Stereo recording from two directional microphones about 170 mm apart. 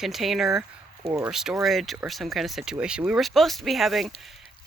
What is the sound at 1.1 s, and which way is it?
Speech, 15° right (ahead or behind).